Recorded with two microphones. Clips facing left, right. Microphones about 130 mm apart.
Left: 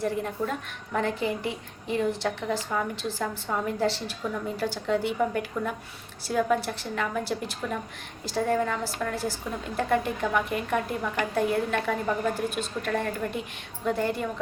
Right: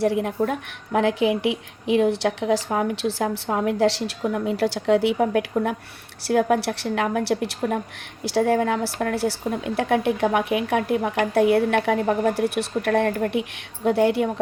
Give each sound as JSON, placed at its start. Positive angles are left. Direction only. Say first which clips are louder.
{"t": 0.0, "sound": "a woman's voice", "louder": "right 7 dB", "side_deg": -75}
{"t": 5.2, "sound": "a woman's voice", "louder": "right 6 dB", "side_deg": -75}
{"t": 13.8, "sound": "a woman's voice", "louder": "right 8 dB", "side_deg": -75}